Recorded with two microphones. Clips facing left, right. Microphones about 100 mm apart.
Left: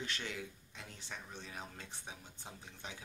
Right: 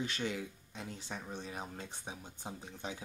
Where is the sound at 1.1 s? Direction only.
40° right (ahead or behind).